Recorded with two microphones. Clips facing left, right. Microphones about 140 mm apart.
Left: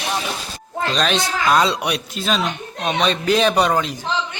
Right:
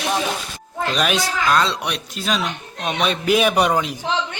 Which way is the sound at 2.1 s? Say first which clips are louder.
Right 1 dB; centre (ahead or behind).